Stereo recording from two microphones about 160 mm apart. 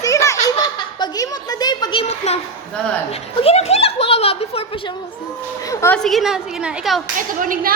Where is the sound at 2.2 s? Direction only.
45° left (ahead or behind).